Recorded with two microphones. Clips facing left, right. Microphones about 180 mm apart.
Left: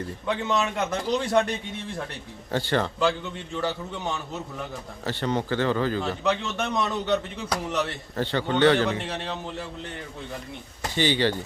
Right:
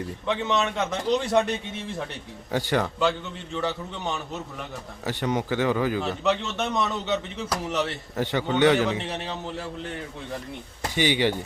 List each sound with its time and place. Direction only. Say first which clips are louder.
0.3 s speech: right 1 dB; centre (ahead or behind)
2.5 s speech: even; 15° right (ahead or behind)
3.6 s speech: even; centre (ahead or behind)
5.3 s speech: even; 15° right (ahead or behind)
10.9 s speech: even; 15° right (ahead or behind)